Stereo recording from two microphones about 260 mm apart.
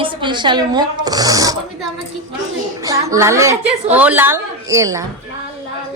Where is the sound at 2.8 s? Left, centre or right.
Centre.